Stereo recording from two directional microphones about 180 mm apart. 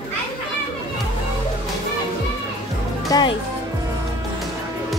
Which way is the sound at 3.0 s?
25° left (ahead or behind).